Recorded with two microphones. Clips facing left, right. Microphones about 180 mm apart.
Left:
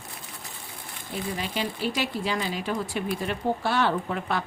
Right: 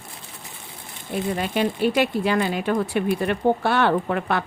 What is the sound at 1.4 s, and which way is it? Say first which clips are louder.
Speech: right 9 dB; 55° right (ahead or behind).